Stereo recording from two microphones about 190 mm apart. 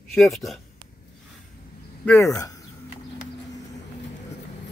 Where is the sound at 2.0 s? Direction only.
10° left (ahead or behind).